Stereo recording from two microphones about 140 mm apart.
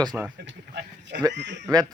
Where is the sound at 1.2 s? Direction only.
25° right (ahead or behind).